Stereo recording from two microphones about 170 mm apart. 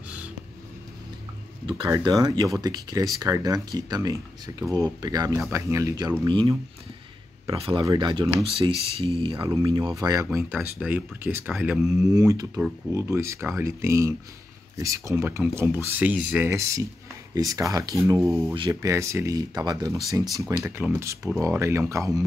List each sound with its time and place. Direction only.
1.9 s speech: 20° right (ahead or behind)
9.4 s speech: 20° right (ahead or behind)
10.5 s speech: 10° right (ahead or behind)